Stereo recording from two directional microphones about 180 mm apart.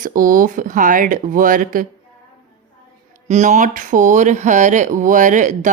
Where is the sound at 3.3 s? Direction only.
40° right (ahead or behind).